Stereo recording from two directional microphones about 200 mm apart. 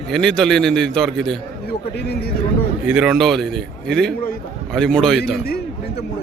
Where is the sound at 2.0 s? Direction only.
55° left (ahead or behind).